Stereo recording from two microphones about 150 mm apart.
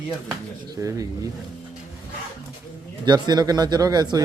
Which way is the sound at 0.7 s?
20° right (ahead or behind).